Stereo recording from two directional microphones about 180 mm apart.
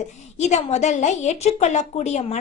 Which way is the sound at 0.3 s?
40° left (ahead or behind).